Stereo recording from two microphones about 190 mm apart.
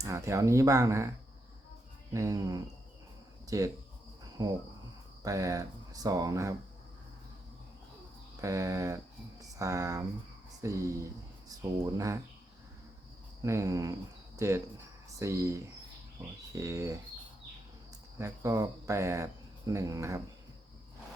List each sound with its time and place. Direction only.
0.0 s speech: 15° right (ahead or behind)
2.1 s speech: 15° right (ahead or behind)
3.4 s cricket: 15° right (ahead or behind)
4.4 s speech: 20° right (ahead or behind)
8.4 s speech: 15° right (ahead or behind)
13.4 s speech: 15° right (ahead or behind)
18.2 s speech: 15° right (ahead or behind)